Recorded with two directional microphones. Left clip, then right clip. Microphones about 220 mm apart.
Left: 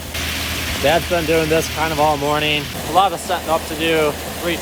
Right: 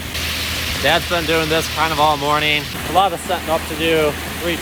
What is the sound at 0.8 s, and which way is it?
Speech, 10° right (ahead or behind).